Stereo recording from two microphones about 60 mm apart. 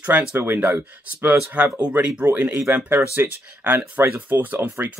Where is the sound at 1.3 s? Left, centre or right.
Right.